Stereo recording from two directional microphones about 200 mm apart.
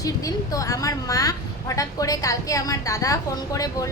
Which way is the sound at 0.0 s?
15° left (ahead or behind).